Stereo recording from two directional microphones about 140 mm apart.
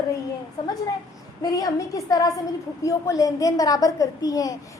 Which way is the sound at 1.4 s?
25° left (ahead or behind).